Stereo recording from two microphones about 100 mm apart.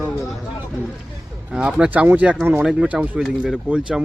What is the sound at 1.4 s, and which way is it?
Speech, 10° right (ahead or behind).